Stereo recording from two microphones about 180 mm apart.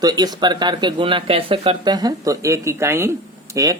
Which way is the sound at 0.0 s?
20° right (ahead or behind).